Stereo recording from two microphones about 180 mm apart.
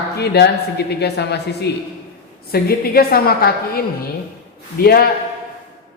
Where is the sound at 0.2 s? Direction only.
65° left (ahead or behind).